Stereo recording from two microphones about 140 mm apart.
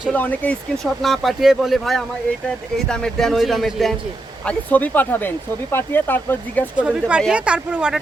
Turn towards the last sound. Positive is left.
turn(degrees=-5)  # may be behind; listen again after turning